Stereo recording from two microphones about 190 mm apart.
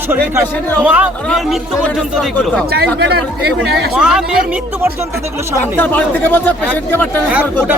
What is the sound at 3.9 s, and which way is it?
Speech, 5° right (ahead or behind).